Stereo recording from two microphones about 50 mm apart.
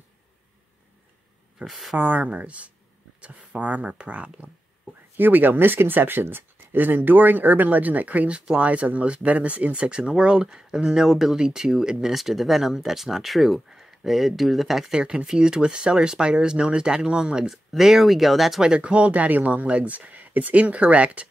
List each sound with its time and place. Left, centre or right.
1.7 s speech: centre
2.0 s speech: right
5.1 s speech: right; by 15.0 s centre
15.0 s speech: right; by 18.6 s centre
18.8 s speech: right